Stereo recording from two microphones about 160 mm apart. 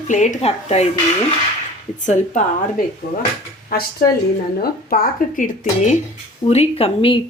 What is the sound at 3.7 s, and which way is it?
Speech, 75° left (ahead or behind).